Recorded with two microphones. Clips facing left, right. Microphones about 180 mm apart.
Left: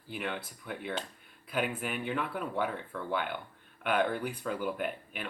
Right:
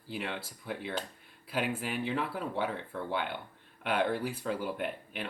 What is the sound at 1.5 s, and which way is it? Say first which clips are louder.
Speech: even; 30° right (ahead or behind).